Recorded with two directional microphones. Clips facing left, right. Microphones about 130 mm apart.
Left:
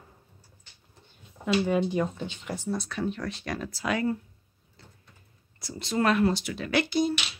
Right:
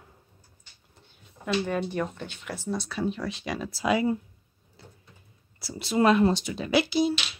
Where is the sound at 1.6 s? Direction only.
15° left (ahead or behind).